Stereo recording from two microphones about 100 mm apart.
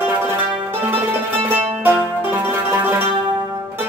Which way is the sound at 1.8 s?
15° right (ahead or behind).